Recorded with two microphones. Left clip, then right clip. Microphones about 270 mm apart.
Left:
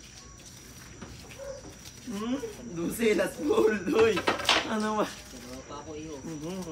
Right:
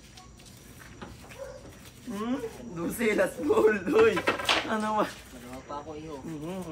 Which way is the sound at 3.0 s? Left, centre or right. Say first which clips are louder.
Even; centre.